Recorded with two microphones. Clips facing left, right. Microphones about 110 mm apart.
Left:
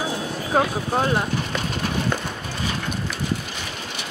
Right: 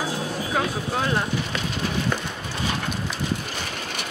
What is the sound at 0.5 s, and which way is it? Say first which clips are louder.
Speech: left 6 dB; 35° left (ahead or behind).